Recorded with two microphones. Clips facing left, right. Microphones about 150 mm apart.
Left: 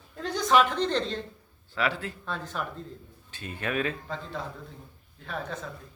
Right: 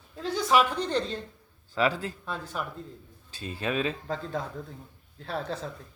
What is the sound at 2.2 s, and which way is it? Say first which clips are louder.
Speech: even; 10° right (ahead or behind).